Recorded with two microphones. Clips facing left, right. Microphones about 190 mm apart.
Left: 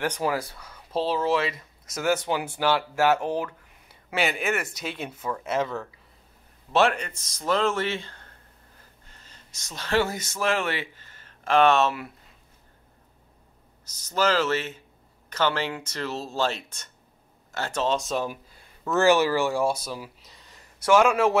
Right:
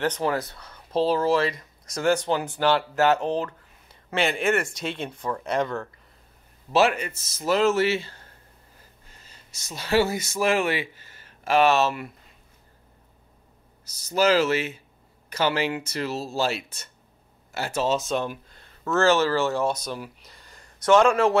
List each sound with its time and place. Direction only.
0.0 s speech: 10° left (ahead or behind)
13.9 s speech: 10° right (ahead or behind); by 21.4 s 5° left (ahead or behind)